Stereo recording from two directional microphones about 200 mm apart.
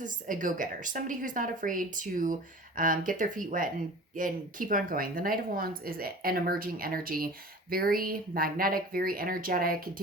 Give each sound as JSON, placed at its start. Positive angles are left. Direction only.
{"t": 0.0, "sound": "a woman's voice", "side_deg": -40}